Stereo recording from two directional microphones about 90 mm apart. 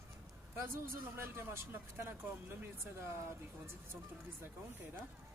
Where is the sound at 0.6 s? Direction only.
25° right (ahead or behind).